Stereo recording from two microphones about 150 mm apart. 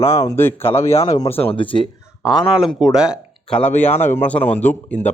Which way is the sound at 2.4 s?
Centre (ahead or behind).